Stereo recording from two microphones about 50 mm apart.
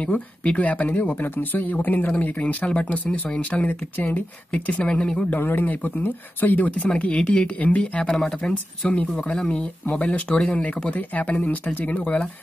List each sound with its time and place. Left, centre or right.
0.0 s speech: left
2.1 s speech: left
3.3 s speech: left
4.8 s speech: centre
5.3 s speech: left